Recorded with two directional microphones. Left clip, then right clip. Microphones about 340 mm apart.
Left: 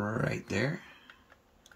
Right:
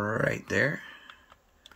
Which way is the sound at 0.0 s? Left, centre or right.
Centre.